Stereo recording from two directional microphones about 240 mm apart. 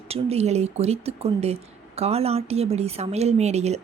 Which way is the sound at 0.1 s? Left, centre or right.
Right.